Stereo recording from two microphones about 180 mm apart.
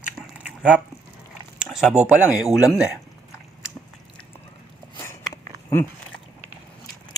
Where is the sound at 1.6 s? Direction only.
5° right (ahead or behind).